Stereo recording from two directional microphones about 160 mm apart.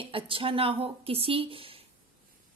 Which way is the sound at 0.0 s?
35° right (ahead or behind).